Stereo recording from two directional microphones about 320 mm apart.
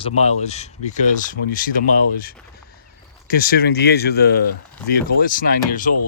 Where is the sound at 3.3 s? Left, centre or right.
Left.